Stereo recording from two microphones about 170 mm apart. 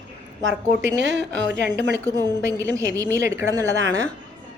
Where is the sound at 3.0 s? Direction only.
20° right (ahead or behind).